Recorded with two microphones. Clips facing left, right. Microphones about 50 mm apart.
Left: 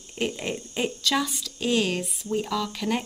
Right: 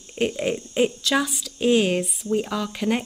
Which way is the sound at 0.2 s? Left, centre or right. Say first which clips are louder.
Right 5 dB; centre.